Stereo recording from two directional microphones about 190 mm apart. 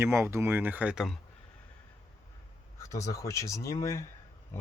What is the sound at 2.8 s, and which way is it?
Speech, 15° left (ahead or behind).